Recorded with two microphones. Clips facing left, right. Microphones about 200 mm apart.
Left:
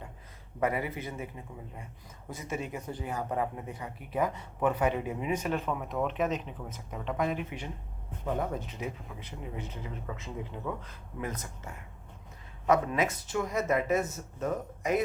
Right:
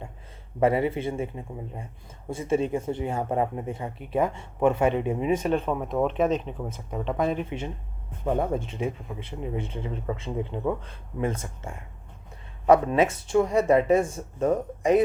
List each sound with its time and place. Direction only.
0.6 s speech: 30° right (ahead or behind)